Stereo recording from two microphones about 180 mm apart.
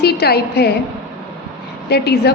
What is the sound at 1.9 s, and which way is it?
Speech, 60° left (ahead or behind).